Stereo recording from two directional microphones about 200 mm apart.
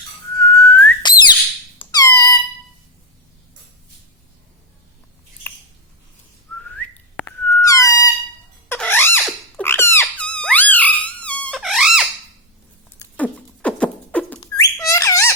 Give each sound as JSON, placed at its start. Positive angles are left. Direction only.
{"t": 0.3, "sound": "whistling", "side_deg": 10}
{"t": 1.0, "sound": "a sound", "side_deg": 20}
{"t": 1.8, "sound": "squeak", "side_deg": 20}
{"t": 7.4, "sound": "music", "side_deg": 10}
{"t": 8.7, "sound": "squeak", "side_deg": 10}
{"t": 13.1, "sound": "beatboxing", "side_deg": 5}
{"t": 14.4, "sound": "a sound", "side_deg": 15}